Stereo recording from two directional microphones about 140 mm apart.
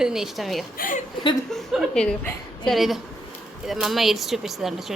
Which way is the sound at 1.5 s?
Centre (ahead or behind).